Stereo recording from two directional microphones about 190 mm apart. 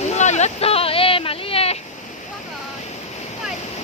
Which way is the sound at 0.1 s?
35° left (ahead or behind).